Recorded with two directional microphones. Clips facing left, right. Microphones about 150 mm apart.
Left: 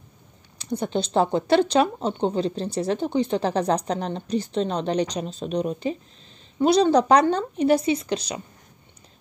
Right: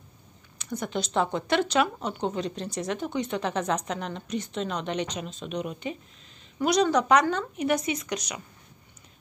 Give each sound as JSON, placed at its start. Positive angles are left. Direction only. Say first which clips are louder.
{"t": 0.6, "sound": "speech", "louder": "left 5 dB", "side_deg": 30}